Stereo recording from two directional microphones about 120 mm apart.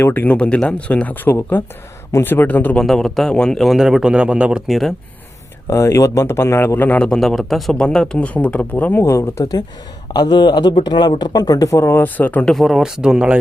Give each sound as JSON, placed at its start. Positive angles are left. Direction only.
{"t": 0.0, "sound": "speech", "side_deg": 15}
{"t": 2.8, "sound": "a man's voice", "side_deg": 0}
{"t": 5.6, "sound": "speech", "side_deg": 25}